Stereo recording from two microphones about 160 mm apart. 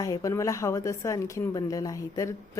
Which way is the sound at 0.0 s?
20° left (ahead or behind).